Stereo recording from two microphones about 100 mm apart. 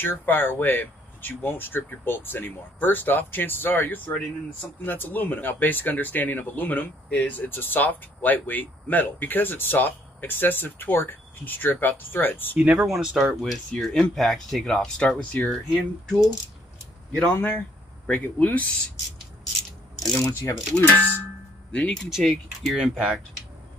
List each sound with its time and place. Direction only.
0.0 s speech: 20° left (ahead or behind)
12.5 s speech: 10° right (ahead or behind)
13.7 s speech: 10° left (ahead or behind)
17.3 s speech: 20° left (ahead or behind)
20.2 s speech: 30° left (ahead or behind); by 22.8 s centre (ahead or behind)
22.9 s speech: 10° right (ahead or behind)